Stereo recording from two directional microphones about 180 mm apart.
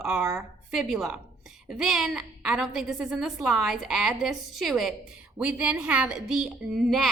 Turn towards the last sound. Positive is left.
turn(degrees=0)  # may be behind; listen again after turning